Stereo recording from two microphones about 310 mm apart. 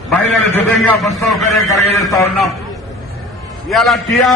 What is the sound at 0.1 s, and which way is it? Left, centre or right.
A man's voice, centre.